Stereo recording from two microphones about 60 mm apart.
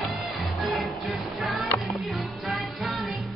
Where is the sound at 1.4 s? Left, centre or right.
Centre.